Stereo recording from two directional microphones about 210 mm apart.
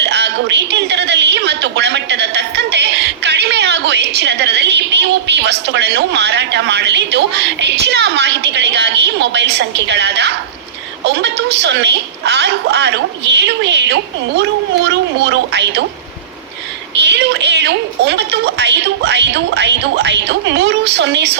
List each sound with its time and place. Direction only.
0.0 s a sound: 55° right (ahead or behind)
11.0 s a woman's voice: 55° right (ahead or behind)
16.9 s a woman's voice: 55° right (ahead or behind)